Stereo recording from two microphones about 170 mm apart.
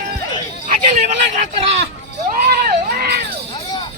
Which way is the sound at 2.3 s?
55° right (ahead or behind).